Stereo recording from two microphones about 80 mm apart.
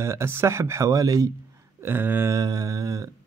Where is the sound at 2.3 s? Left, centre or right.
Right.